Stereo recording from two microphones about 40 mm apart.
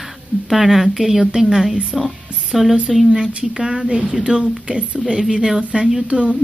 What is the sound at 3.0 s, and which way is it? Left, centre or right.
A woman's voice, right.